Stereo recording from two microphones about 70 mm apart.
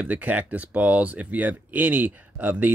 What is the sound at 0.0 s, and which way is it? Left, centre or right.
Speech, right.